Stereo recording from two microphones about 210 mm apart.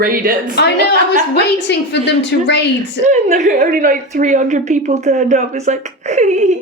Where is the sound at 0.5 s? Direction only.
50° left (ahead or behind).